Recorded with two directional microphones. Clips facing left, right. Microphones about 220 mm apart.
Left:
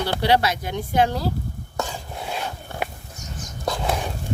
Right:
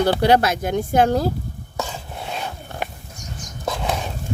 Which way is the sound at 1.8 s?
Centre (ahead or behind).